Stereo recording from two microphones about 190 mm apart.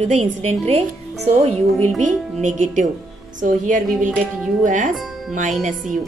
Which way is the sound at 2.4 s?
40° right (ahead or behind).